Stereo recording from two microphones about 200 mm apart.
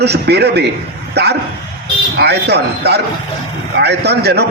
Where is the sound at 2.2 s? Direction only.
55° right (ahead or behind).